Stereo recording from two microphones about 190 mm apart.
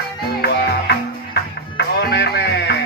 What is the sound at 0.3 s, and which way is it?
Music, 60° left (ahead or behind).